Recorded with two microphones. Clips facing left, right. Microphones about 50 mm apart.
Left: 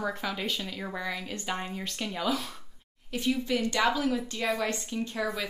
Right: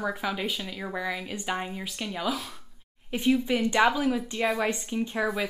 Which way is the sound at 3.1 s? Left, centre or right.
Right.